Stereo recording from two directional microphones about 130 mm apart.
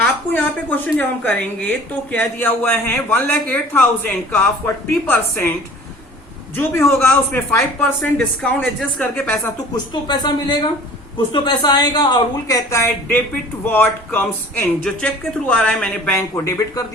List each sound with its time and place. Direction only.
0.0 s a man's voice: 10° left (ahead or behind)
6.6 s a man's voice: 15° left (ahead or behind)
9.9 s a woman's voice: 35° left (ahead or behind)